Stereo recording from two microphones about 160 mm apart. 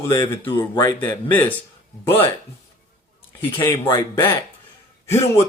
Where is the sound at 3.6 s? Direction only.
20° left (ahead or behind).